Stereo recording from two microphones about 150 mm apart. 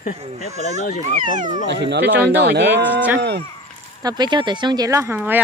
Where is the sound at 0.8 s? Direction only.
55° left (ahead or behind).